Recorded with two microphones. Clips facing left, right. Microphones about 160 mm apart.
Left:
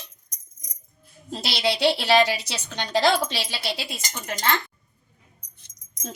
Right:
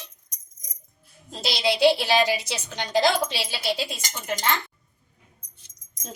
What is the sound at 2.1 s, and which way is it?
A woman's voice, 70° left (ahead or behind).